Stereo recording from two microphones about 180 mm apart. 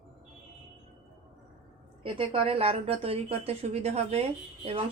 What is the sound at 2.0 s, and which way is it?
A woman's voice, 30° right (ahead or behind).